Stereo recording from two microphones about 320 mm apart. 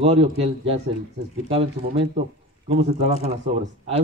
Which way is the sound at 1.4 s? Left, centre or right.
Centre.